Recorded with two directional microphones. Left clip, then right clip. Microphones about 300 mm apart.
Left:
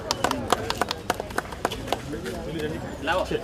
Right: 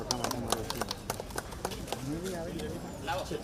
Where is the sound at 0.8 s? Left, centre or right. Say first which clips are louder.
Left 10 dB; right.